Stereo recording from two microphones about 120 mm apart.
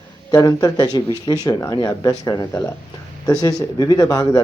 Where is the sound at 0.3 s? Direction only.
30° left (ahead or behind).